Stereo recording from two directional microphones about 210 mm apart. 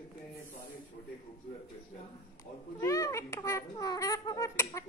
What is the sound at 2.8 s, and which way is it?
A child's voice, 15° left (ahead or behind).